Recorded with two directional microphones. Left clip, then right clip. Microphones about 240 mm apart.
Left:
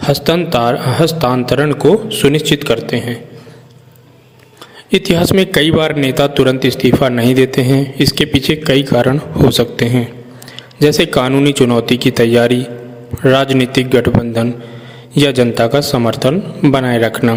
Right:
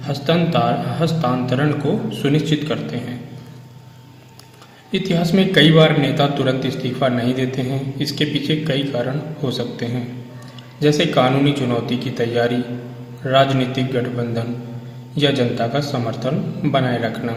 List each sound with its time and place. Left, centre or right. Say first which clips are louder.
0.0 s a man's voice: left 6 dB; left
4.9 s a man's voice: left 8 dB; left